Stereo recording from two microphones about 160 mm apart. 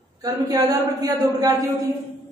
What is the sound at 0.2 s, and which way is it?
A woman's voice, 25° right (ahead or behind).